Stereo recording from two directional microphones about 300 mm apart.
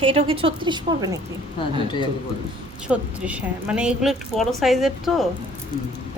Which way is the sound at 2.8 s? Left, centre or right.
Centre.